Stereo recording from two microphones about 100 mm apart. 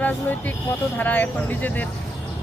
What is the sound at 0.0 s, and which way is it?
Speech, 15° left (ahead or behind).